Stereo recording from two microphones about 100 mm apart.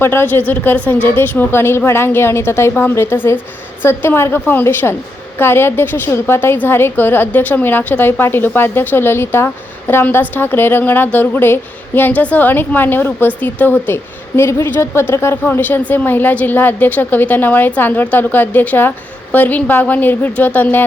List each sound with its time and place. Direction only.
0.0 s a woman's voice: 25° left (ahead or behind)